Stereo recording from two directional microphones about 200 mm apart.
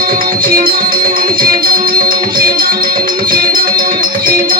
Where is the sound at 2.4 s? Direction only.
45° right (ahead or behind).